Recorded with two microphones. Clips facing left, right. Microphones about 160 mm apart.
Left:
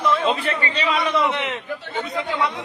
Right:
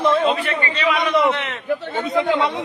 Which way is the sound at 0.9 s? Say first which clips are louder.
Right 3 dB; 20° right (ahead or behind).